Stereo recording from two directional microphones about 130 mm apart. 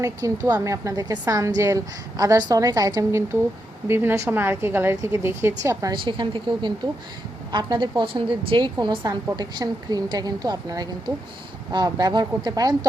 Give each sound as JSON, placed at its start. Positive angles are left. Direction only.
{"t": 0.0, "sound": "a woman's voice", "side_deg": -25}
{"t": 5.9, "sound": "a woman's voice", "side_deg": -40}